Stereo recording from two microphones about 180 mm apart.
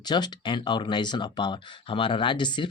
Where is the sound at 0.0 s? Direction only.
25° left (ahead or behind).